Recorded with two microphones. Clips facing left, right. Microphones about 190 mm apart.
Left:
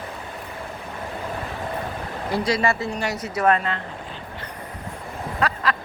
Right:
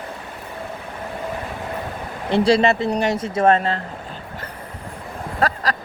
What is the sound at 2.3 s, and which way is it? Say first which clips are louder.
Speech: right 7 dB; 30° right (ahead or behind).